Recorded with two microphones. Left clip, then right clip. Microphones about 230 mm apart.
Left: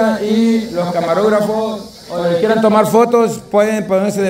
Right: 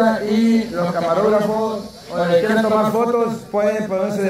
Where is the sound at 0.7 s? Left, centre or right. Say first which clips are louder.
Left 4 dB; left.